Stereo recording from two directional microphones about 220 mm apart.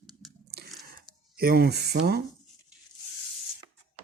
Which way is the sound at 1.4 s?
45° right (ahead or behind).